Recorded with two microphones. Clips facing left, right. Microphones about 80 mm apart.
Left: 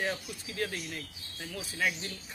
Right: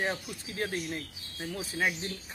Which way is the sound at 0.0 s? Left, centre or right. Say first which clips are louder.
Right 1 dB; right.